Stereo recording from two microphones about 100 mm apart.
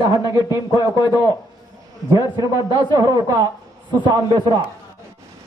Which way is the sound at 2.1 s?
40° right (ahead or behind).